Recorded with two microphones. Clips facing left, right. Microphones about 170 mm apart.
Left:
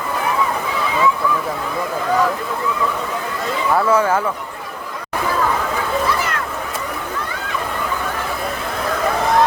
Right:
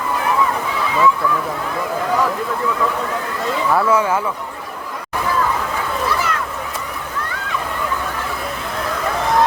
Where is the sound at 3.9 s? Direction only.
35° left (ahead or behind).